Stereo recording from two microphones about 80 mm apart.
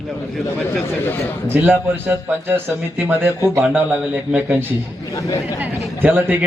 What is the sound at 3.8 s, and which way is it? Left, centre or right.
Speech, centre.